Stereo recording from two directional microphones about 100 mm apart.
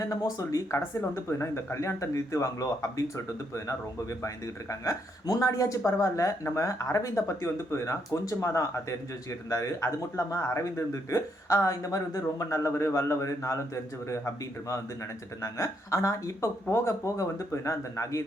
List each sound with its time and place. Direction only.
0.0 s speech: 35° left (ahead or behind)
4.7 s speech: 35° left (ahead or behind)
15.4 s speech: 30° left (ahead or behind)